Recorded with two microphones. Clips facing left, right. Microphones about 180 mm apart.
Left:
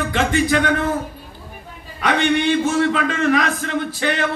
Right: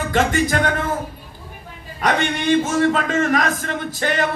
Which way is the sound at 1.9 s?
45° right (ahead or behind).